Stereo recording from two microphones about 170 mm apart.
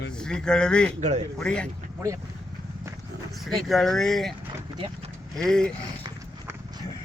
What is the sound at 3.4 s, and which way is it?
Speech, centre (ahead or behind).